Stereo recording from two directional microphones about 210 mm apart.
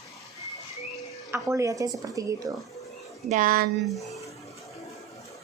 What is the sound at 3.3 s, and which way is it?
Speech, 40° right (ahead or behind).